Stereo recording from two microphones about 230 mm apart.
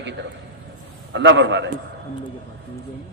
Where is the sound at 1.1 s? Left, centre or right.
Right.